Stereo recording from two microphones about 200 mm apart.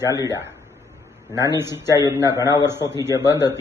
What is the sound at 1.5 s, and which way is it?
A man's voice, 10° right (ahead or behind).